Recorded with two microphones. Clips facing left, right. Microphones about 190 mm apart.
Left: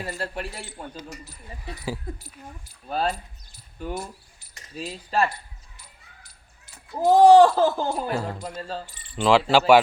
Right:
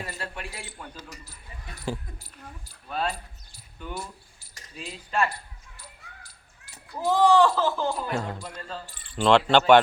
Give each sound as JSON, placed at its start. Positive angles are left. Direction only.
{"t": 0.0, "sound": "speech", "side_deg": 35}
{"t": 1.8, "sound": "speech", "side_deg": 5}
{"t": 3.8, "sound": "speech", "side_deg": 40}
{"t": 6.9, "sound": "speech", "side_deg": 45}
{"t": 8.1, "sound": "speech", "side_deg": 0}
{"t": 8.7, "sound": "speech", "side_deg": 35}
{"t": 9.1, "sound": "speech", "side_deg": 5}